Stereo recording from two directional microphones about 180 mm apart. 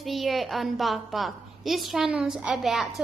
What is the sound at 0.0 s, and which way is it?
A woman's voice, centre (ahead or behind).